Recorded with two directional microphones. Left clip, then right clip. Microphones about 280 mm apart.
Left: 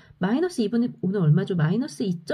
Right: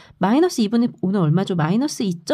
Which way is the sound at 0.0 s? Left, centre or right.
Right.